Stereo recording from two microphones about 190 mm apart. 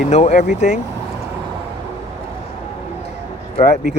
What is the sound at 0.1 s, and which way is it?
Speech, 35° left (ahead or behind).